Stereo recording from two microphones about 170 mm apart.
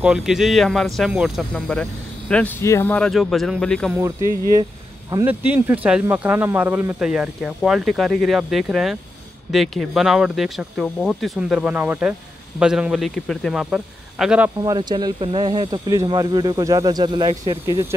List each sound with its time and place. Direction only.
0.0 s speech: 5° right (ahead or behind); by 3.0 s 15° left (ahead or behind)
3.0 s speech: centre (ahead or behind)
3.9 s speech: 15° right (ahead or behind)
14.6 s speech: 25° right (ahead or behind)